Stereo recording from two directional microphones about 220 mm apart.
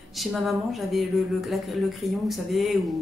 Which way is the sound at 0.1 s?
Centre (ahead or behind).